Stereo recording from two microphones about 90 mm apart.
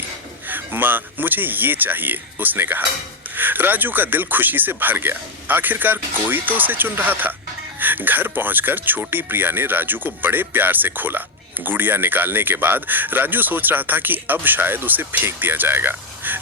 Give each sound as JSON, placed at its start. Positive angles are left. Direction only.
{"t": 0.4, "sound": "speech", "side_deg": -20}